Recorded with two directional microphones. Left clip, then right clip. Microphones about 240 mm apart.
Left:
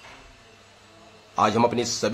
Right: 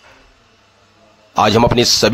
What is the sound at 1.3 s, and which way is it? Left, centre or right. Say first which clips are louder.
Speech: right 9 dB; right.